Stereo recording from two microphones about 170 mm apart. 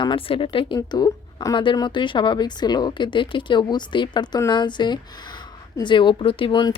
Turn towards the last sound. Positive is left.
turn(degrees=30)  # may be behind; listen again after turning